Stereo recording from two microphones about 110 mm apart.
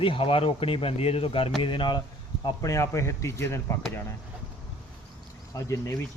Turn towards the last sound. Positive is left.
turn(degrees=30)  # may be behind; listen again after turning